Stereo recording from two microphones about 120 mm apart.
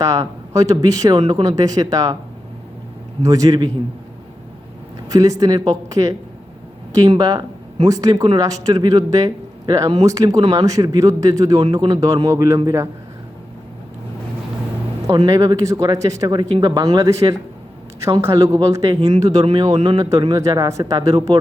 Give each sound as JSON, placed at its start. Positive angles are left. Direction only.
{"t": 0.0, "sound": "speech", "side_deg": -30}
{"t": 3.2, "sound": "speech", "side_deg": -30}
{"t": 5.0, "sound": "speech", "side_deg": -30}
{"t": 7.2, "sound": "speech", "side_deg": -35}
{"t": 11.6, "sound": "speech", "side_deg": -40}
{"t": 15.0, "sound": "speech", "side_deg": -30}